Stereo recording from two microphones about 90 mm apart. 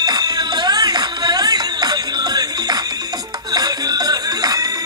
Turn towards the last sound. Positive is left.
turn(degrees=-45)  # may be behind; listen again after turning